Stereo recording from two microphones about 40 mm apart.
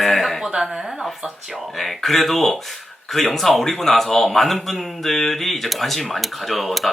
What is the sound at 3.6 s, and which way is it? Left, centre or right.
Speech, centre.